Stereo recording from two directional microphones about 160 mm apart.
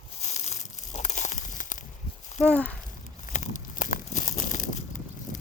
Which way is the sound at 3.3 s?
50° left (ahead or behind).